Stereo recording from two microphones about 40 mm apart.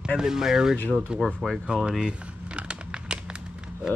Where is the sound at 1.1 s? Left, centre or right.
Right.